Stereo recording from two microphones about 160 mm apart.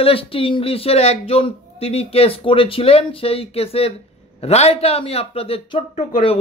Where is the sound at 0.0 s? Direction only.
35° left (ahead or behind).